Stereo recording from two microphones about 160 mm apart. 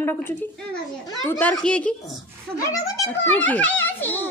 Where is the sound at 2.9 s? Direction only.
15° left (ahead or behind).